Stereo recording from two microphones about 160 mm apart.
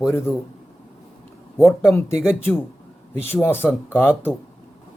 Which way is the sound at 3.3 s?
15° left (ahead or behind).